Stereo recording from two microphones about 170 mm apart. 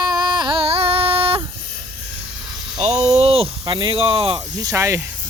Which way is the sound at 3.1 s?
35° right (ahead or behind).